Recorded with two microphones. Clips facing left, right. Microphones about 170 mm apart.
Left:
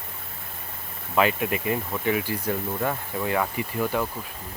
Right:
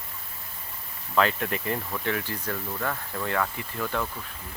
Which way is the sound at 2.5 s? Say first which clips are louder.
Left 4 dB; 25° left (ahead or behind).